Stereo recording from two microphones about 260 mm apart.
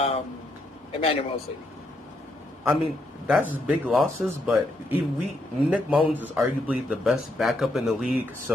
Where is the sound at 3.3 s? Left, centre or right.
Centre.